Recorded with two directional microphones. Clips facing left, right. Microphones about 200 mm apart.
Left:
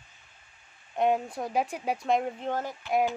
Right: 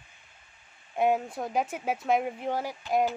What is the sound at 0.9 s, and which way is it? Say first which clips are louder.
Speech: even; 5° right (ahead or behind).